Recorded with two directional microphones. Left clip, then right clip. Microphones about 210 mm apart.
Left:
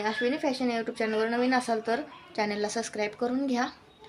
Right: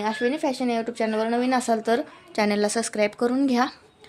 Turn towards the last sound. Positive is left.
turn(degrees=-60)  # may be behind; listen again after turning